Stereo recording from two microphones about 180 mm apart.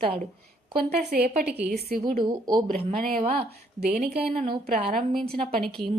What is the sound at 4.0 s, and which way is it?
Speech, 35° right (ahead or behind).